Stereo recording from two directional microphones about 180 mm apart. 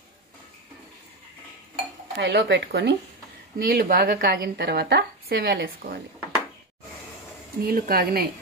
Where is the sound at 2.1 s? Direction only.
75° right (ahead or behind).